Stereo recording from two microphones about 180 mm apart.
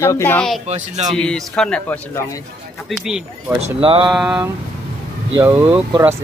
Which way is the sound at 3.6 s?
30° right (ahead or behind).